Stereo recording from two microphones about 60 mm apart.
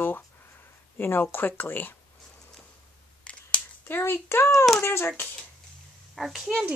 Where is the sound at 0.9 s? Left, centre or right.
Left.